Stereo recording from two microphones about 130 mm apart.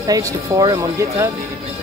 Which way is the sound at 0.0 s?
30° right (ahead or behind).